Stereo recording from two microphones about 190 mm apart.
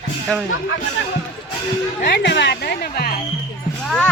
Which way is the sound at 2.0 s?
65° left (ahead or behind).